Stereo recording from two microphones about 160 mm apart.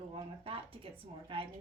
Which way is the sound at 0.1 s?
35° right (ahead or behind).